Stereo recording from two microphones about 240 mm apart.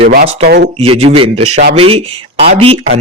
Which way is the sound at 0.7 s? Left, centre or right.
Right.